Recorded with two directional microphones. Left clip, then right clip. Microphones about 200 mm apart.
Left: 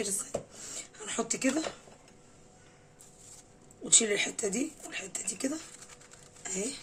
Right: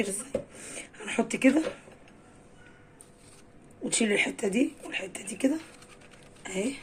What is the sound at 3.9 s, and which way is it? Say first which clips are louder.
Speech: right 1 dB; 10° left (ahead or behind).